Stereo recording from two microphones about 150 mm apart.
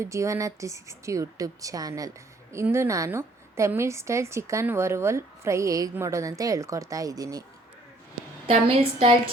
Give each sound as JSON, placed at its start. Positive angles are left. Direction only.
{"t": 0.0, "sound": "a woman's voice", "side_deg": -20}
{"t": 8.6, "sound": "a woman's voice", "side_deg": -40}